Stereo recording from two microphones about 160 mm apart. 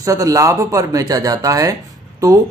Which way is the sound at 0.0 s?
20° right (ahead or behind).